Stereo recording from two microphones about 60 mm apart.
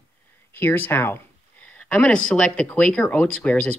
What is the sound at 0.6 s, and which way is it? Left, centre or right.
Speech, left.